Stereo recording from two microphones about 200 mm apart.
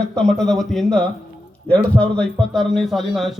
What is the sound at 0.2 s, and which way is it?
A man's voice, 5° left (ahead or behind).